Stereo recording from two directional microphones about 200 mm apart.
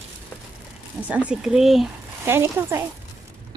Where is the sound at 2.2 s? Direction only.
10° right (ahead or behind).